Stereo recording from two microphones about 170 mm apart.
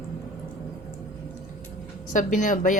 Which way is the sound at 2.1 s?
50° left (ahead or behind).